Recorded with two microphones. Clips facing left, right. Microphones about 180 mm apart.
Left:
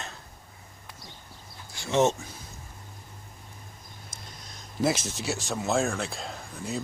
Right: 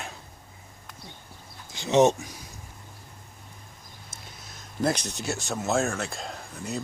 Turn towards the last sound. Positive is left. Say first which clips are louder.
# even
turn(degrees=0)  # may be behind; listen again after turning